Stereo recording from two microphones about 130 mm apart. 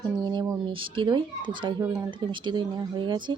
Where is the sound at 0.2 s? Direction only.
35° right (ahead or behind).